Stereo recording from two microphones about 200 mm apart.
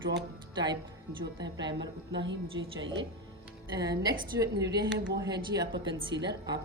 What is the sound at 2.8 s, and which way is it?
Speech, 65° right (ahead or behind).